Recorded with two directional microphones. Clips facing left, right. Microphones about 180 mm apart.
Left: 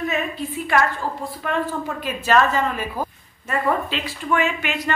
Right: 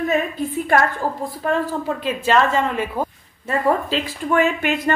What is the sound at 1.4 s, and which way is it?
Speech, 35° right (ahead or behind).